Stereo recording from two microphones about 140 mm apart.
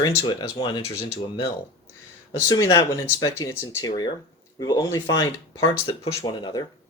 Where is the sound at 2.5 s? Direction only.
25° left (ahead or behind).